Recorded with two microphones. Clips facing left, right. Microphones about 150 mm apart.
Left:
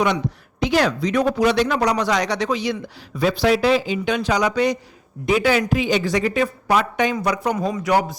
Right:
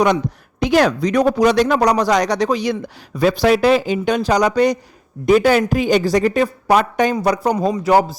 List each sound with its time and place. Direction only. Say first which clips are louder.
0.6 s a woman's voice: right 4 dB; 45° right (ahead or behind)